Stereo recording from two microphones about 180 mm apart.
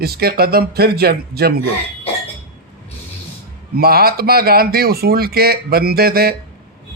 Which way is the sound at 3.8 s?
60° right (ahead or behind).